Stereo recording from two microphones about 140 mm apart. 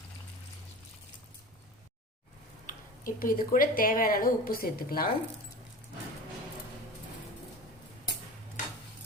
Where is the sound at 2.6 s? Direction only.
80° left.